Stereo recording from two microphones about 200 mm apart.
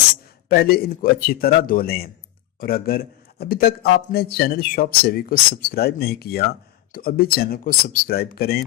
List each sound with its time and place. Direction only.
0.4 s a man's voice: 50° left (ahead or behind)